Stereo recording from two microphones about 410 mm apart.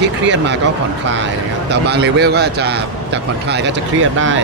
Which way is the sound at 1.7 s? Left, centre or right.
Right.